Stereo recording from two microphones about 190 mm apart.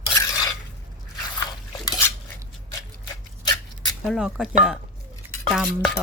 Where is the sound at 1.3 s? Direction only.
5° left (ahead or behind).